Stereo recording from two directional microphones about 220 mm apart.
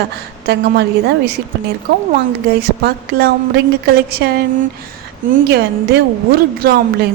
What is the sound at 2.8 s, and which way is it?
Speech, 45° right (ahead or behind).